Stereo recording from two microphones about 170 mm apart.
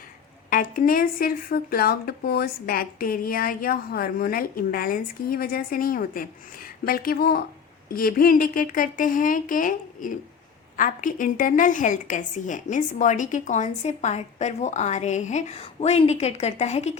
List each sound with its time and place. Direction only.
0.5 s a woman's voice: 55° left (ahead or behind); by 17.0 s 40° left (ahead or behind)